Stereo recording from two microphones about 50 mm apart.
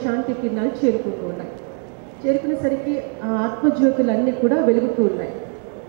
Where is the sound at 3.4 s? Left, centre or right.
Centre.